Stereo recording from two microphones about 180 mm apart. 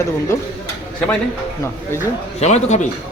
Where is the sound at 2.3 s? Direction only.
40° left (ahead or behind).